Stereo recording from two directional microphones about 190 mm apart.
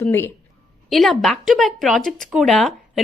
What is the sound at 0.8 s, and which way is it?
Speech, centre (ahead or behind).